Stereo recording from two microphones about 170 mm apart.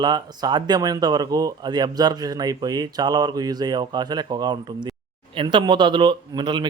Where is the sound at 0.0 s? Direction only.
25° right (ahead or behind).